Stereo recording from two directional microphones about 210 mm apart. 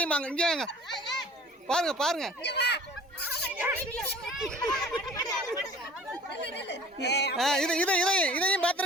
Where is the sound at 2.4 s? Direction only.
55° left (ahead or behind).